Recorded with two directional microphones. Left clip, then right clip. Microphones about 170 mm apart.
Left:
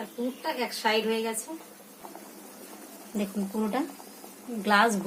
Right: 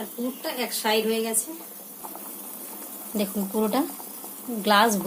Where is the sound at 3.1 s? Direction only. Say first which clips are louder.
Right 5 dB; 35° right (ahead or behind).